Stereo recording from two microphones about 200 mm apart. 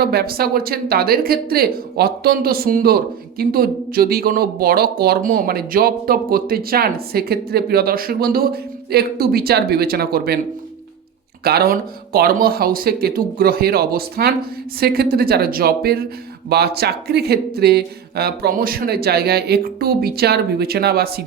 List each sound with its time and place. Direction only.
0.0 s speech: 50° right (ahead or behind)
11.4 s speech: 50° right (ahead or behind)